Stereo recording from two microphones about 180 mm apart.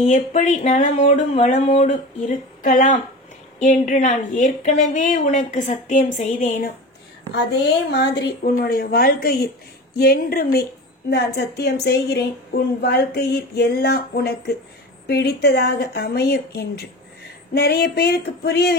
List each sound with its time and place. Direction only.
0.0 s speech: 45° left (ahead or behind)
7.6 s a woman's voice: 65° left (ahead or behind)